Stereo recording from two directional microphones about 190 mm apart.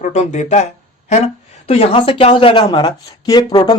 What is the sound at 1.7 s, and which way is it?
Speech, 30° left (ahead or behind).